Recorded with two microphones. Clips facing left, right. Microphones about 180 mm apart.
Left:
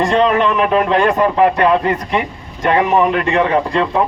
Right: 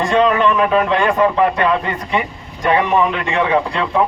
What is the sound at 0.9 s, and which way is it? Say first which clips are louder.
A man's voice: left 1 dB; 40° left (ahead or behind).